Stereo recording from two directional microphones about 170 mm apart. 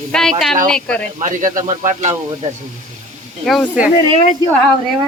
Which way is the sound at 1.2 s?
50° right (ahead or behind).